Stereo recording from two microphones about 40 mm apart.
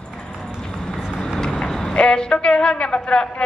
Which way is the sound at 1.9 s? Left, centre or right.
Left.